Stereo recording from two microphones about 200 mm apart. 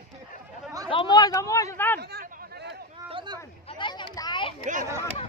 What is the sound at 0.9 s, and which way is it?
Speech, 25° left (ahead or behind).